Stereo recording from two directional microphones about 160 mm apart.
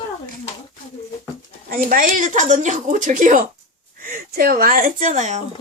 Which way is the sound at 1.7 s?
60° right (ahead or behind).